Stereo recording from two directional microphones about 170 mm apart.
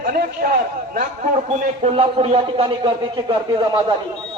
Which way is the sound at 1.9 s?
35° right (ahead or behind).